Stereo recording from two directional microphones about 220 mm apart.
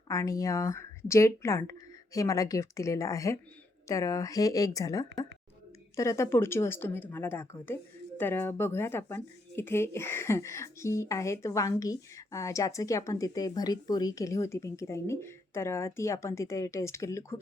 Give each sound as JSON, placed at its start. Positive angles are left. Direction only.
{"t": 0.1, "sound": "speech", "side_deg": 15}